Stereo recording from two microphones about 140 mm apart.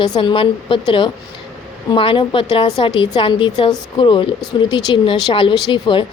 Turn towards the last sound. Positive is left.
turn(degrees=35)  # may be behind; listen again after turning